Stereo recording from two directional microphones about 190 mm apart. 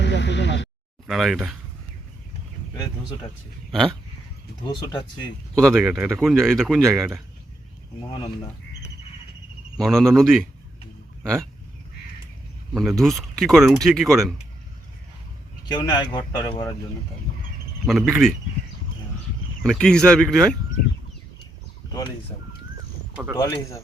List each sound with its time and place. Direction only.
0.0 s a sound: 70° left (ahead or behind)
1.0 s speech: centre (ahead or behind)
3.7 s speech: centre (ahead or behind)
4.6 s speech: 20° left (ahead or behind)
5.5 s speech: 5° left (ahead or behind)
9.8 s speech: centre (ahead or behind)
12.7 s speech: centre (ahead or behind)
15.7 s speech: 20° left (ahead or behind)
17.8 s speech: centre (ahead or behind)
19.6 s speech: 5° left (ahead or behind)
23.4 s speech: 15° left (ahead or behind)